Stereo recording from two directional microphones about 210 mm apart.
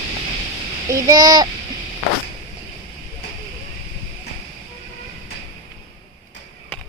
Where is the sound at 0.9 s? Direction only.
15° right (ahead or behind).